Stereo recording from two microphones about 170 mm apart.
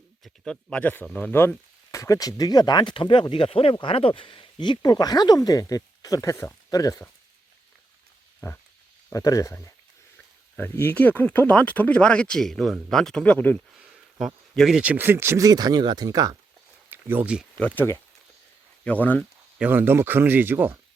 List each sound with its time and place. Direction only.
0.4 s speech: 5° left (ahead or behind); by 7.1 s 20° left (ahead or behind)
9.0 s speech: 20° left (ahead or behind)
13.7 s speech: 5° right (ahead or behind); by 16.3 s 20° right (ahead or behind)
16.9 s speech: 10° right (ahead or behind)
17.6 s speech: 10° left (ahead or behind)
19.5 s speech: 10° right (ahead or behind)